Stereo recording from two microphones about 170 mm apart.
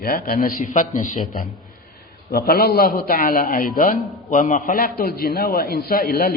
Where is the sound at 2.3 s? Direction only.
60° left (ahead or behind).